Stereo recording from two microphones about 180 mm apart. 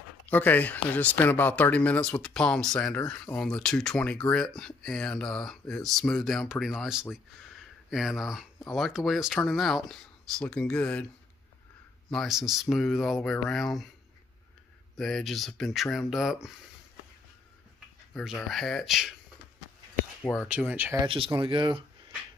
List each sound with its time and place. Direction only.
0.3 s speech: 10° left (ahead or behind)
12.1 s speech: centre (ahead or behind)
15.0 s speech: centre (ahead or behind)
18.1 s speech: centre (ahead or behind)
20.4 s speech: 5° right (ahead or behind)
21.0 s speech: 30° right (ahead or behind)